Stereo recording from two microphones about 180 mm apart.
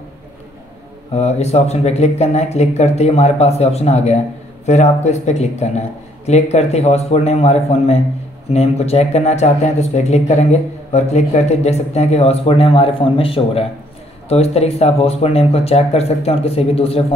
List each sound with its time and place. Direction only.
1.1 s speech: 35° left (ahead or behind)